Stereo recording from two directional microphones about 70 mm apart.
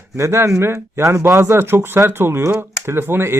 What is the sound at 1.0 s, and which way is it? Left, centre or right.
Speech, right.